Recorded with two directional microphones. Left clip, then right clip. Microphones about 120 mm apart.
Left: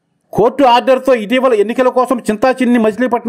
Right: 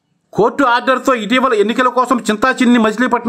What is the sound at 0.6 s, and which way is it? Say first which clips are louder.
A man's voice: left 6 dB; 20° left (ahead or behind).